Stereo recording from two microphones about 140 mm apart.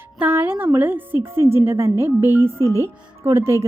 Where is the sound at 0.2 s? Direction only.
15° right (ahead or behind).